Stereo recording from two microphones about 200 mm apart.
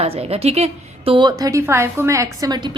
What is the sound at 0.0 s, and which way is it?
A woman's voice, 30° right (ahead or behind).